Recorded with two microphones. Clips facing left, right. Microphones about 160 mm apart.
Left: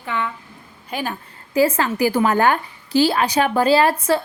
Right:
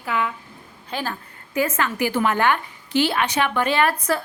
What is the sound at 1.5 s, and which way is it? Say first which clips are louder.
A woman's voice: left 5 dB; 30° left (ahead or behind).